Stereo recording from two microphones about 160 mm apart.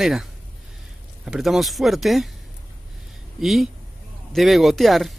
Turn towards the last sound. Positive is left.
turn(degrees=0)  # may be behind; listen again after turning